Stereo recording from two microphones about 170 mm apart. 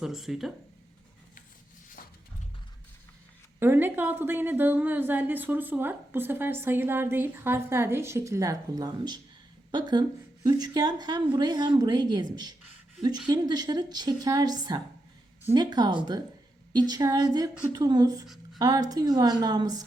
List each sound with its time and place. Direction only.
0.0 s speech: centre (ahead or behind)
2.0 s a sound: 55° left (ahead or behind)
3.6 s a woman's voice: 10° right (ahead or behind)